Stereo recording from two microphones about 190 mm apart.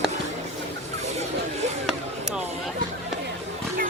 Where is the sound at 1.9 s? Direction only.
Centre (ahead or behind).